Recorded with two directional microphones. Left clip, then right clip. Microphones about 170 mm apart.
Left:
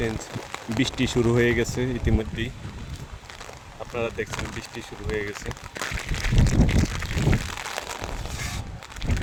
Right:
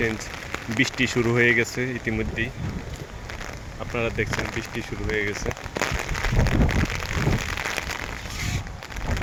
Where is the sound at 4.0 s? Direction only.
10° left (ahead or behind).